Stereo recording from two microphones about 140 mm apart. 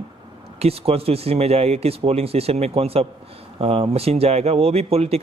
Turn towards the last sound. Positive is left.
turn(degrees=-45)  # may be behind; listen again after turning